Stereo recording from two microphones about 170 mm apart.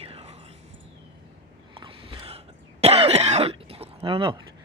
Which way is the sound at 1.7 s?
30° right (ahead or behind).